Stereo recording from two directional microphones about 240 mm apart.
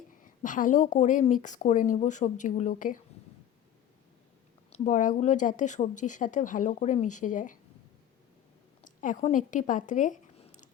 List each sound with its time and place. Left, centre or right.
0.4 s speech: left
4.7 s speech: left
8.8 s speech: left